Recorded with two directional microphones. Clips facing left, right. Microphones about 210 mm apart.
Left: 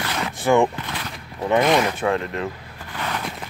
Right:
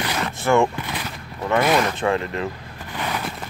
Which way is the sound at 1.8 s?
10° left (ahead or behind).